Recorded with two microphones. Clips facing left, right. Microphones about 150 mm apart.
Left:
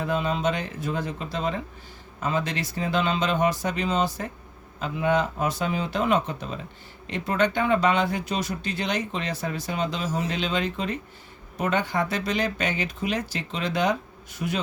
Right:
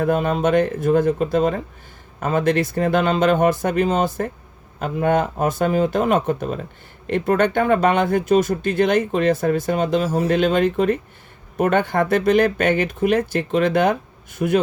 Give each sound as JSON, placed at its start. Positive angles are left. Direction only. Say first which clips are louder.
{"t": 0.0, "sound": "speech", "louder": "right 6 dB", "side_deg": -55}